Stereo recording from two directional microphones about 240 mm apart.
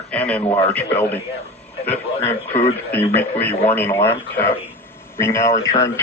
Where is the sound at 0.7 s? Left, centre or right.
Centre.